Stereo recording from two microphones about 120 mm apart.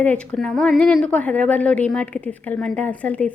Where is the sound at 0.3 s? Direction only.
5° left (ahead or behind).